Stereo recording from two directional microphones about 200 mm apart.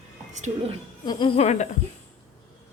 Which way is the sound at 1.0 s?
30° left (ahead or behind).